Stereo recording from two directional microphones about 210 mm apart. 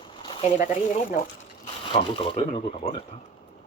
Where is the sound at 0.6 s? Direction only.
40° left (ahead or behind).